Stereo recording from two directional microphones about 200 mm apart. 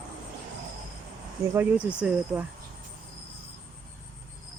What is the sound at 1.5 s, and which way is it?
Speech, 5° right (ahead or behind).